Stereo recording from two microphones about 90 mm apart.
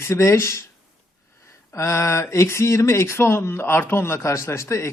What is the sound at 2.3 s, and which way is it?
Speech, 30° left (ahead or behind).